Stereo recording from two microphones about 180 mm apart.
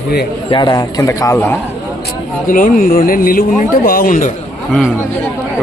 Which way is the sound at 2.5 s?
50° left (ahead or behind).